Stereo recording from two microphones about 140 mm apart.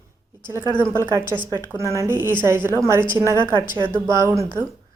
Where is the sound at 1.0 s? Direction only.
15° right (ahead or behind).